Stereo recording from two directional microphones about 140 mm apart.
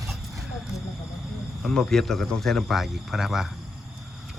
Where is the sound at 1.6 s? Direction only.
5° left (ahead or behind).